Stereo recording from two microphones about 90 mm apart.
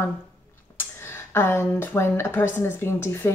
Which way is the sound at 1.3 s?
25° left (ahead or behind).